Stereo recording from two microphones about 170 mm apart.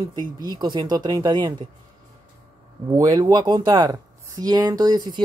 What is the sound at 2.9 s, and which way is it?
Speech, 20° right (ahead or behind).